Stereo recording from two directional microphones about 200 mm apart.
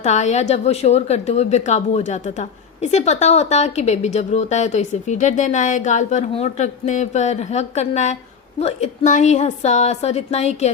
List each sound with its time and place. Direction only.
0.0 s a woman's voice: 35° left (ahead or behind)